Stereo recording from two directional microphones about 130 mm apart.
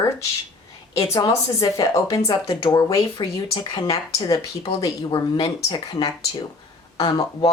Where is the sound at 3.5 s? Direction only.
40° left (ahead or behind).